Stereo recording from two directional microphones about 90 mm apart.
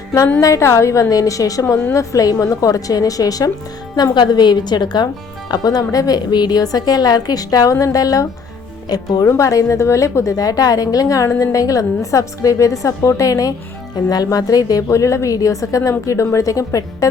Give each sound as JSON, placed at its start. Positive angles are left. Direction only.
{"t": 0.3, "sound": "a woman's voice", "side_deg": 35}